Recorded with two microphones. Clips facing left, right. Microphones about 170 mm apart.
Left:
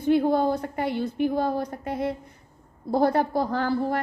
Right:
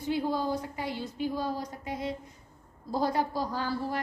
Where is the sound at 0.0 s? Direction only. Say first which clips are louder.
Left 9 dB; 60° left (ahead or behind).